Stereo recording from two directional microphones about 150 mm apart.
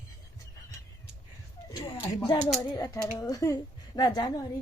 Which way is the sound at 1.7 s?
30° left (ahead or behind).